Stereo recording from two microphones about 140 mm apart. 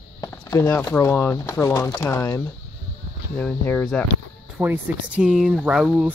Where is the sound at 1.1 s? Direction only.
20° left (ahead or behind).